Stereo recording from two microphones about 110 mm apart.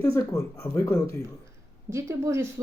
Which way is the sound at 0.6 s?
15° left (ahead or behind).